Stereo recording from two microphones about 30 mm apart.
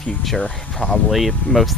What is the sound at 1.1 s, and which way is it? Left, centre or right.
Speech, centre.